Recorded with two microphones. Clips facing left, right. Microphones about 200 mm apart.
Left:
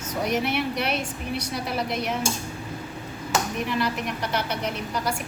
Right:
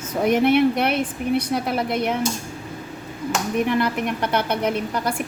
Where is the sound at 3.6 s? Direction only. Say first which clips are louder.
Right 5 dB; 55° right (ahead or behind).